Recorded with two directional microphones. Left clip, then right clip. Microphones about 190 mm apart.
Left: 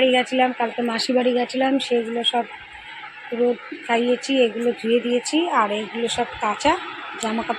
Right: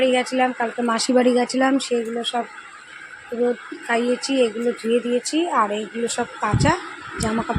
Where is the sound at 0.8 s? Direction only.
20° right (ahead or behind).